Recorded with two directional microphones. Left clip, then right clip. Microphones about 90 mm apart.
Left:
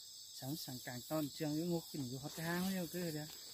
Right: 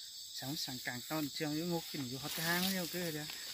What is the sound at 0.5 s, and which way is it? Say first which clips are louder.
Speech: right 7 dB; 20° left (ahead or behind).